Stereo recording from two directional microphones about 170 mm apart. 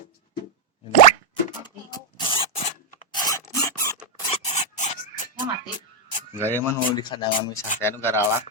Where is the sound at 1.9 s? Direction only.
30° left (ahead or behind).